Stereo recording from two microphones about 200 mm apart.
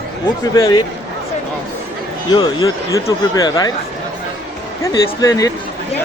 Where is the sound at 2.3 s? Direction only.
20° left (ahead or behind).